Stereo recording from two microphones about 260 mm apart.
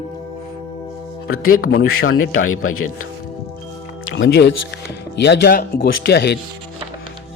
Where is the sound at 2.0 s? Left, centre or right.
Left.